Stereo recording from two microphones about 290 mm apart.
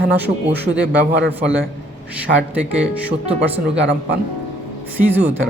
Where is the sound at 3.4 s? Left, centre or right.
Right.